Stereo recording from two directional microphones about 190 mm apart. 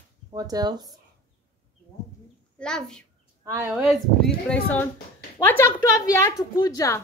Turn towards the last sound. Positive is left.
turn(degrees=20)  # may be behind; listen again after turning